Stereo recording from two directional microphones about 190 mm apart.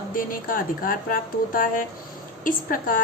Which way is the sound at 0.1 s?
45° left (ahead or behind).